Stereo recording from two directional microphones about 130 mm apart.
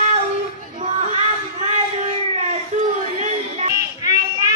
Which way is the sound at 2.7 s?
60° right (ahead or behind).